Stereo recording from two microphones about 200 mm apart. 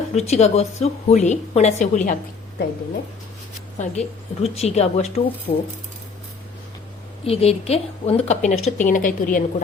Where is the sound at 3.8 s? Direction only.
35° left (ahead or behind).